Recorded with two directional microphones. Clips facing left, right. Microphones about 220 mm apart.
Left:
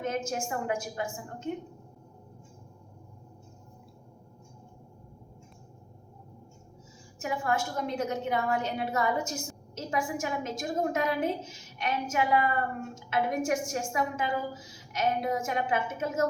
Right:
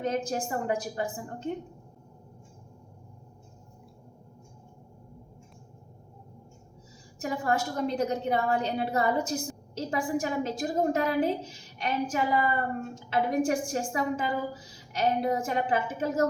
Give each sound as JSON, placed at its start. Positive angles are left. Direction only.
{"t": 0.0, "sound": "a woman's voice", "side_deg": -35}
{"t": 7.2, "sound": "a woman's voice", "side_deg": -35}